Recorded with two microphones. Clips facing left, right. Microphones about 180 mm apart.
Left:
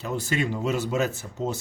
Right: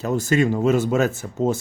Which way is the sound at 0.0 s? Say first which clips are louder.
Right 8 dB; 45° right (ahead or behind).